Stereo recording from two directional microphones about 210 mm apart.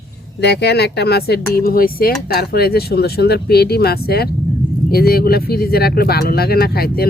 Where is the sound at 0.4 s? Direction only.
50° left (ahead or behind).